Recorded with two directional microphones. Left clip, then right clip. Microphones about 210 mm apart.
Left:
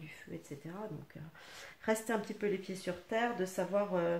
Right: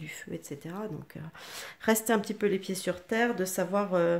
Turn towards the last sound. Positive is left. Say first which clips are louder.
# right 6 dB
turn(degrees=-40)  # may be behind; listen again after turning